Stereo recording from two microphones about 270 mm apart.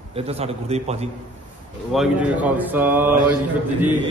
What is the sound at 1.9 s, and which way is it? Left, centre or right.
Speech, centre.